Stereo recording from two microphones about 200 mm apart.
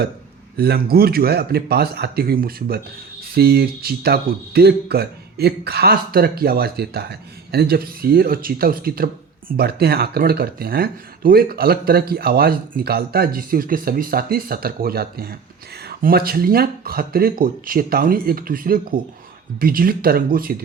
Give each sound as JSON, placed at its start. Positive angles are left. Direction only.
{"t": 0.5, "sound": "speech", "side_deg": -50}